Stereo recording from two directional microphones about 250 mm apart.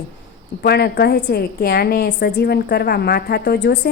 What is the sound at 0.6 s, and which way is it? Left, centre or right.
A woman's voice, left.